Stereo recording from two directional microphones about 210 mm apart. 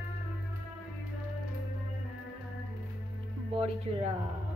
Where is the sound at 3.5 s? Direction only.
30° right (ahead or behind).